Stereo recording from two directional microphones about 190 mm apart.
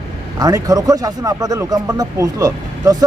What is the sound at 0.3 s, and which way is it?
Speech, 20° right (ahead or behind).